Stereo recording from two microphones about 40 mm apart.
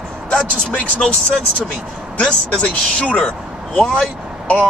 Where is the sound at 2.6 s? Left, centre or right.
Left.